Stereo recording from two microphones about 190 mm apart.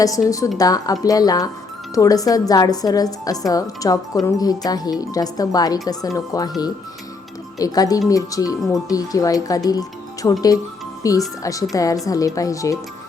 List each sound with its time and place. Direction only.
0.3 s speech: 15° left (ahead or behind)
7.6 s speech: 20° left (ahead or behind)